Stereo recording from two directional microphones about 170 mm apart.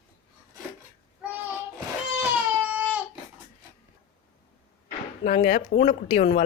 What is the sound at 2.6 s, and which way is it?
Baby cry, 10° right (ahead or behind).